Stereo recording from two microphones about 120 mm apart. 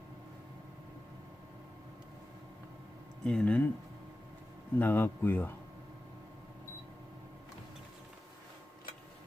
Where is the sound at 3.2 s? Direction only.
5° left (ahead or behind).